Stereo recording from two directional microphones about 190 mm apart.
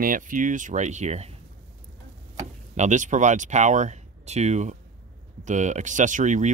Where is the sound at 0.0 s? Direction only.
45° right (ahead or behind).